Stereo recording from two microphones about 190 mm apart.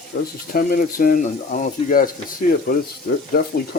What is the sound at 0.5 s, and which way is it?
Speech, 50° left (ahead or behind).